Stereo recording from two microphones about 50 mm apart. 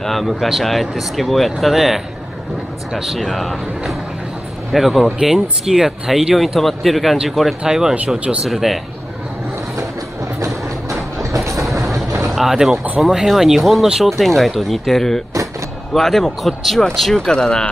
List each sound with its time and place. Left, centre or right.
0.0 s speech: centre
4.7 s speech: centre
11.3 s train: right
12.3 s a sound: centre
13.0 s speech: centre
17.2 s speech: centre